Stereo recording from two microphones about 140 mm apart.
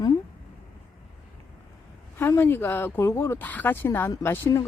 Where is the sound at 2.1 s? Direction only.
15° left (ahead or behind).